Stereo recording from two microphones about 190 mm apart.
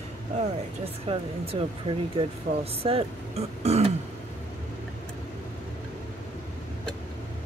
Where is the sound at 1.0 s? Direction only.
30° right (ahead or behind).